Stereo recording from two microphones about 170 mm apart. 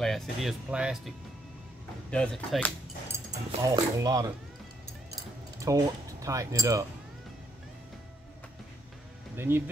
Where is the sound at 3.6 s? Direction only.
20° right (ahead or behind).